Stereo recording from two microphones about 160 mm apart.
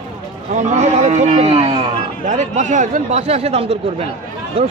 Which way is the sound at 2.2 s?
50° right (ahead or behind).